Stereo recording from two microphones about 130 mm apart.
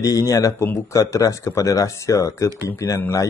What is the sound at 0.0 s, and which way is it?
A man's voice, 25° left (ahead or behind).